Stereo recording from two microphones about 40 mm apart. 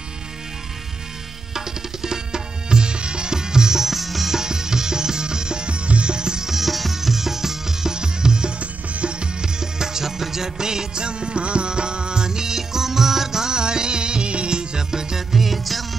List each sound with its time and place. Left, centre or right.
1.5 s tabla: centre
8.5 s music: right
15.3 s music: centre